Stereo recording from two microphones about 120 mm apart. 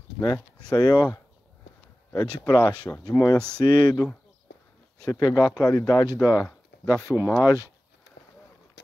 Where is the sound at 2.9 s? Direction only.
15° left (ahead or behind).